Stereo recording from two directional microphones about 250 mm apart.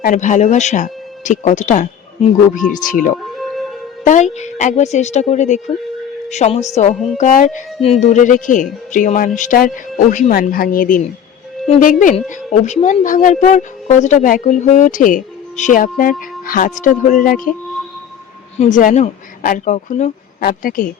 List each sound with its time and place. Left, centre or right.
0.0 s a woman's voice: left
3.3 s music: centre
4.0 s a woman's voice: left
18.5 s speech: left